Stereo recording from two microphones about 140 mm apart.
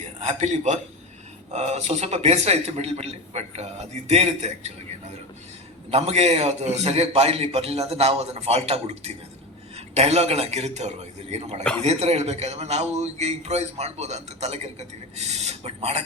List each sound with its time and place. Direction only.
0.2 s a man's voice: 50° right (ahead or behind)
5.9 s a man's voice: 50° right (ahead or behind)